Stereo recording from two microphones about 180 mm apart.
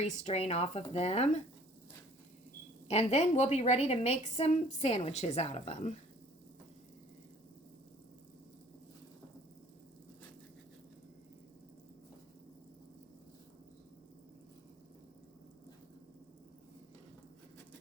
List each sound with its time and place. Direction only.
0.0 s a woman's voice: 40° left (ahead or behind)
2.8 s a woman's voice: 35° left (ahead or behind)